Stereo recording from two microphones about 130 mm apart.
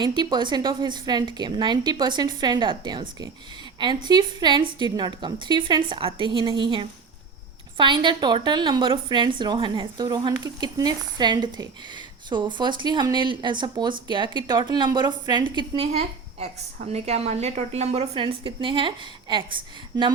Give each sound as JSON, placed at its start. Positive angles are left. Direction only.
{"t": 0.0, "sound": "a woman's voice", "side_deg": -35}